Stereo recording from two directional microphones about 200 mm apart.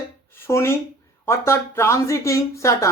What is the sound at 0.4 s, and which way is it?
Speech, 15° left (ahead or behind).